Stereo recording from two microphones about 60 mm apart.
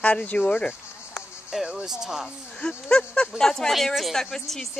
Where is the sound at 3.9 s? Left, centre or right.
Centre.